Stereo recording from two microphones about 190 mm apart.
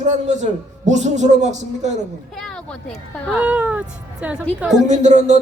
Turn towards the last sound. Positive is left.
turn(degrees=-40)  # may be behind; listen again after turning